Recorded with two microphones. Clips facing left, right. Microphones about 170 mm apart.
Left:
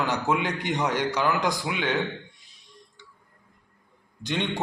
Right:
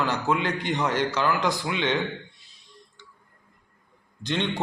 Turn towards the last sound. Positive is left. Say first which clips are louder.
# right 1 dB
turn(degrees=15)  # may be behind; listen again after turning